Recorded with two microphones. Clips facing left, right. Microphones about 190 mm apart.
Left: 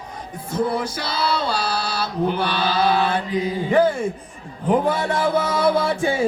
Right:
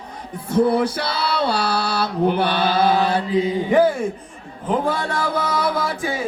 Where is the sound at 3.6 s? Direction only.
15° right (ahead or behind).